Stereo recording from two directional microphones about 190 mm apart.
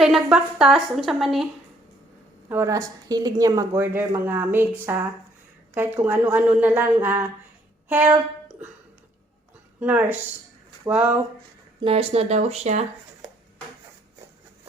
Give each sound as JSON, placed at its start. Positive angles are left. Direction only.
{"t": 0.0, "sound": "a woman's voice", "side_deg": -5}
{"t": 2.5, "sound": "a woman's voice", "side_deg": -15}
{"t": 7.9, "sound": "a sound", "side_deg": -10}
{"t": 9.8, "sound": "a woman's voice", "side_deg": -10}
{"t": 11.8, "sound": "speech", "side_deg": -30}